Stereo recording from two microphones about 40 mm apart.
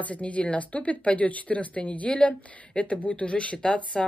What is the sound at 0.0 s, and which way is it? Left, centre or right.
Speech, left.